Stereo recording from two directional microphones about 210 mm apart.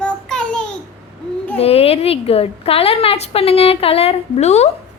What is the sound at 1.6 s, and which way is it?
A woman's voice, 30° left (ahead or behind).